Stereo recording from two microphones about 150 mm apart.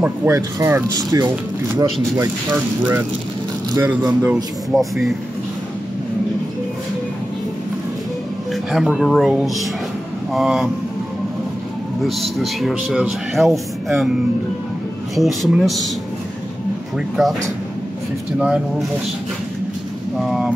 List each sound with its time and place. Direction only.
0.0 s speech: 15° right (ahead or behind)
4.6 s speech: centre (ahead or behind)
8.7 s speech: centre (ahead or behind)
12.0 s speech: centre (ahead or behind)
15.1 s speech: centre (ahead or behind)
18.4 s speech: 5° right (ahead or behind)
20.2 s speech: 5° right (ahead or behind)